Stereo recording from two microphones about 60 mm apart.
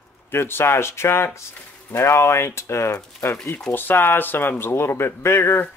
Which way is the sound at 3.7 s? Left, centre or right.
Left.